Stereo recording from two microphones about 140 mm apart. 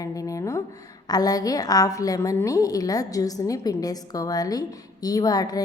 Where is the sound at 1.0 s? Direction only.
30° left (ahead or behind).